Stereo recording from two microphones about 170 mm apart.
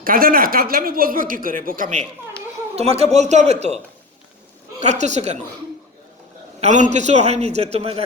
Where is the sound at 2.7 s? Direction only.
35° right (ahead or behind).